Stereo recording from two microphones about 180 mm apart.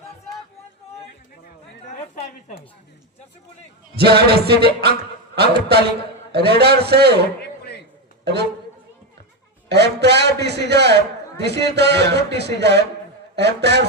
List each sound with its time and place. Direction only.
3.9 s a sound: 65° right (ahead or behind)
7.6 s chop: 65° left (ahead or behind)
8.2 s a man's voice: 65° right (ahead or behind)
9.6 s a man's voice: 70° right (ahead or behind)